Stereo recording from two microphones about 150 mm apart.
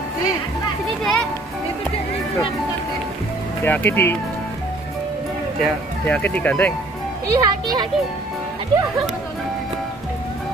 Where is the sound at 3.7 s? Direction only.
15° left (ahead or behind).